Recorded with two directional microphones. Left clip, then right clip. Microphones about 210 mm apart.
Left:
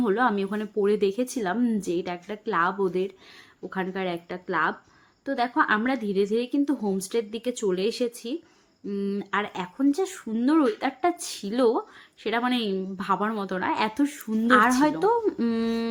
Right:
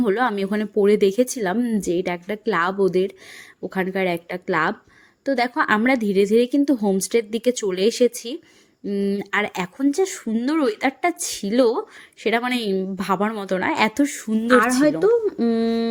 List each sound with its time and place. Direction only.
0.0 s a woman's voice: 30° right (ahead or behind)
14.8 s speech: 10° right (ahead or behind)